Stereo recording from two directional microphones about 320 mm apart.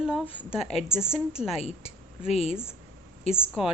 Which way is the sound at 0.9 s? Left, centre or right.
Centre.